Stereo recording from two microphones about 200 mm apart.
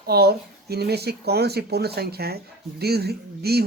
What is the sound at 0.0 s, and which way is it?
Speech, 55° right (ahead or behind).